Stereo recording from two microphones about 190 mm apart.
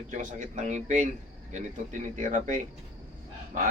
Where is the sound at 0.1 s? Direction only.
40° right (ahead or behind).